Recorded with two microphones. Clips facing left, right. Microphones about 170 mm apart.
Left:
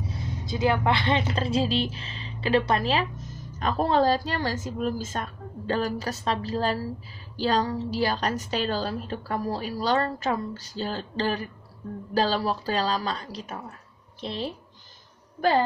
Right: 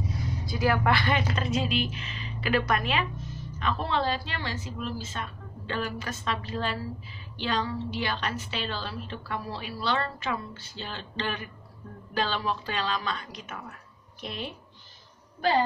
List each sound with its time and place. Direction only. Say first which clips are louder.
0.1 s a woman's voice: left 1 dB; 25° left (ahead or behind)